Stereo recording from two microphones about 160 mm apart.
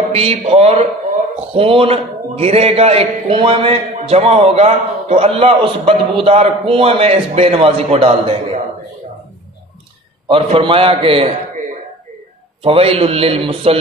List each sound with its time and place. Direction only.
0.1 s a man's voice: 40° right (ahead or behind)
10.2 s a man's voice: 35° right (ahead or behind)
12.6 s a man's voice: 35° right (ahead or behind)